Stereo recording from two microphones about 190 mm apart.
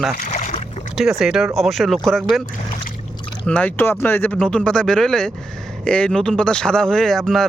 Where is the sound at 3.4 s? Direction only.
5° left (ahead or behind).